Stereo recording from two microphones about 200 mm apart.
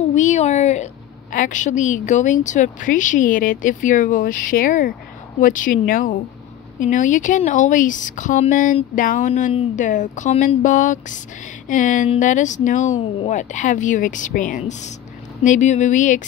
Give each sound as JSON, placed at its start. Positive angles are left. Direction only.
{"t": 0.1, "sound": "speech", "side_deg": 35}